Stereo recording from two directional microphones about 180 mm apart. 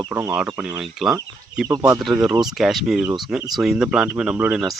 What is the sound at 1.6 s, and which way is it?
Speech, 20° right (ahead or behind).